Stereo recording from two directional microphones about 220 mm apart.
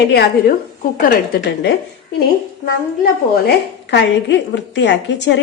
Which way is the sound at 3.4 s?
50° left (ahead or behind).